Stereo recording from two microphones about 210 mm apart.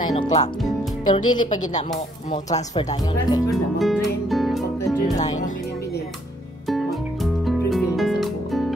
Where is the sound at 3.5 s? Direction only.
Centre (ahead or behind).